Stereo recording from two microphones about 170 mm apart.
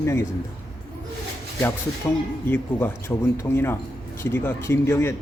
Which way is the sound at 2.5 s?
15° left (ahead or behind).